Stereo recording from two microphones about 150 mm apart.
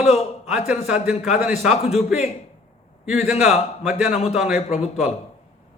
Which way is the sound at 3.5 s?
45° left (ahead or behind).